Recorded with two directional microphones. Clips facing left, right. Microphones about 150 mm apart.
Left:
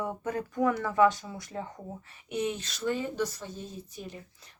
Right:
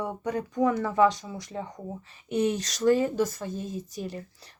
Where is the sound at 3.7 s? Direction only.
90° right.